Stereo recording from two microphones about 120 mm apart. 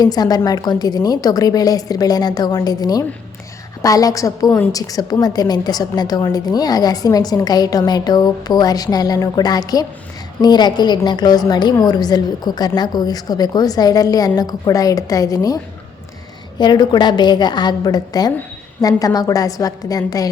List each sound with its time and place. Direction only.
0.0 s a woman's voice: 35° left (ahead or behind)
16.6 s a woman's voice: 35° left (ahead or behind)